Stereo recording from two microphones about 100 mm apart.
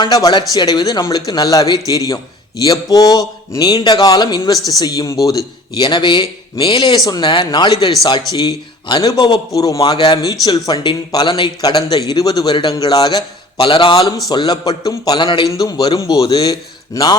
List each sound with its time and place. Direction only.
0.0 s speech: 45° left (ahead or behind)
14.3 s speech: 45° left (ahead or behind)
15.4 s speech: 40° left (ahead or behind)